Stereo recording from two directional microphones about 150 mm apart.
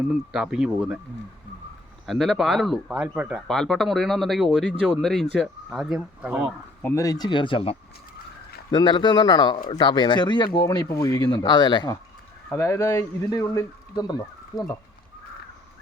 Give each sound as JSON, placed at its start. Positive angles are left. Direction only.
{"t": 0.1, "sound": "speech", "side_deg": -5}
{"t": 2.0, "sound": "speech", "side_deg": 0}
{"t": 6.8, "sound": "speech", "side_deg": 20}
{"t": 12.5, "sound": "speech", "side_deg": 15}